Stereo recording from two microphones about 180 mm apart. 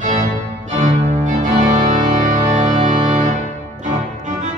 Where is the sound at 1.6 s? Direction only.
45° right (ahead or behind).